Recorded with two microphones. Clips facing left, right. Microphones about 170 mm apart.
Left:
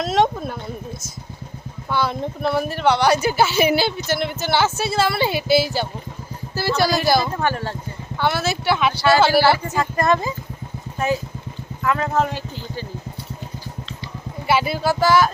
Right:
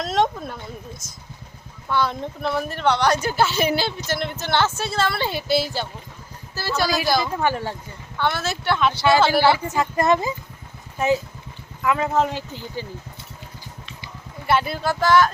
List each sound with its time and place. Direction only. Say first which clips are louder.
0.0 s a sound: left 3 dB; 5° left (ahead or behind)
1.9 s a woman's voice: left 1 dB; 5° left (ahead or behind)
7.3 s speech: even; 15° right (ahead or behind)
8.2 s a woman's voice: left 3 dB; 5° left (ahead or behind)
9.0 s speech: left 1 dB; 15° right (ahead or behind)
9.2 s a woman's voice: left 2 dB; 5° left (ahead or behind)
9.5 s speech: left 1 dB; 20° right (ahead or behind)
14.4 s a woman's voice: left 2 dB; 5° left (ahead or behind)